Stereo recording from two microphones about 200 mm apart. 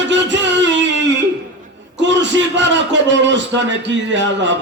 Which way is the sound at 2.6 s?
65° right (ahead or behind).